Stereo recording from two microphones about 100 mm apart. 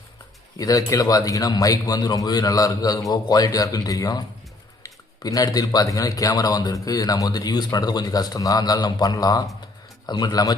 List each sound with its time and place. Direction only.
0.6 s a man's voice: 35° left (ahead or behind)